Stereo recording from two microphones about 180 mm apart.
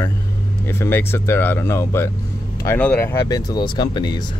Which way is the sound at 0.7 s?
15° left (ahead or behind).